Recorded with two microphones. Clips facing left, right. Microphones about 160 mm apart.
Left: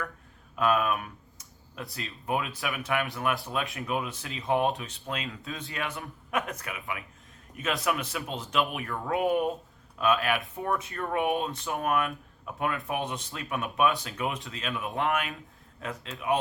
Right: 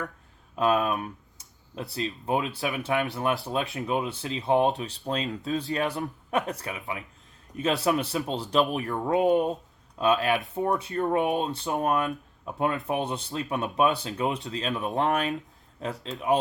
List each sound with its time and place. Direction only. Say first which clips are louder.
0.5 s speech: right 2 dB; 30° right (ahead or behind)